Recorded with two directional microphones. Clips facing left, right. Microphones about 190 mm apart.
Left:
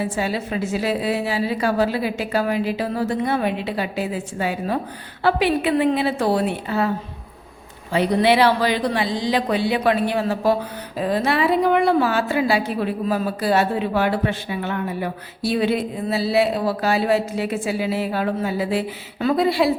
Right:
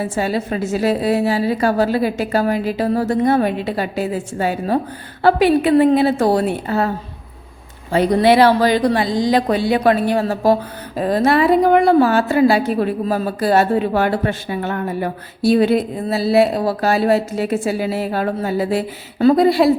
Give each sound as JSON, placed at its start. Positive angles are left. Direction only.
{"t": 0.0, "sound": "speech", "side_deg": -45}
{"t": 7.9, "sound": "speech", "side_deg": -45}